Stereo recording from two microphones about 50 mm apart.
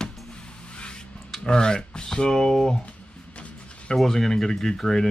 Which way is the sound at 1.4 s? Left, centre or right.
Centre.